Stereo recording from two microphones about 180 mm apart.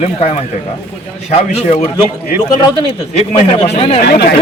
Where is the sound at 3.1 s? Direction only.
30° left (ahead or behind).